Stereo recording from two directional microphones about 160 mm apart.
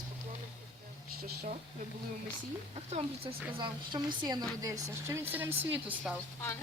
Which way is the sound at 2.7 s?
35° right (ahead or behind).